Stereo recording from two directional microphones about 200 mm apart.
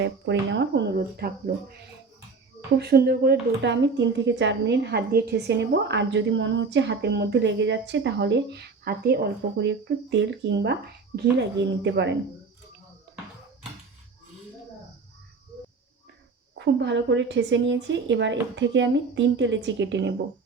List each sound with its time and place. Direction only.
0.0 s a woman's voice: 60° right (ahead or behind)
2.7 s a woman's voice: 55° right (ahead or behind)
16.6 s a woman's voice: 65° right (ahead or behind)